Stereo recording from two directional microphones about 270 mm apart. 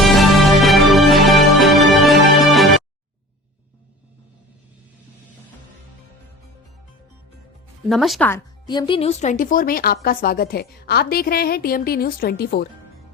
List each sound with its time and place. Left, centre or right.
0.0 s music: centre
7.9 s a woman's voice: centre; by 12.6 s left